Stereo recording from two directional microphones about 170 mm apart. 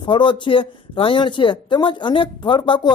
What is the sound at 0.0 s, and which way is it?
A man's voice, 30° left (ahead or behind).